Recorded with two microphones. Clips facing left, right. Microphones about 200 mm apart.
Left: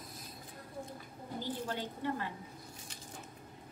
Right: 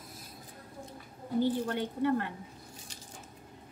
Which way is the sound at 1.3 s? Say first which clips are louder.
Right 9 dB; 60° right (ahead or behind).